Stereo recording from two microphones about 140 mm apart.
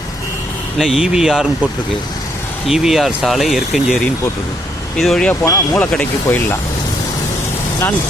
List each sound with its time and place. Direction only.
0.8 s speech: 5° right (ahead or behind)
2.6 s speech: 5° right (ahead or behind)
5.5 s speech: 20° left (ahead or behind)
5.8 s speech: 10° left (ahead or behind)